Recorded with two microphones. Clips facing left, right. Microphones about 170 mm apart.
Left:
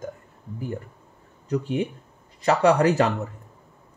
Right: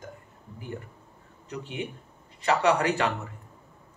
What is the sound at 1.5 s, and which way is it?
Speech, 40° left (ahead or behind).